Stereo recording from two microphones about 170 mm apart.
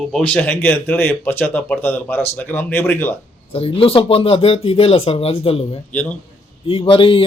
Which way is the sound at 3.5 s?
35° left (ahead or behind).